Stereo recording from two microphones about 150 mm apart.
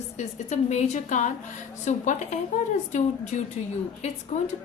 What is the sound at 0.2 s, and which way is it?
A woman's voice, 50° left (ahead or behind).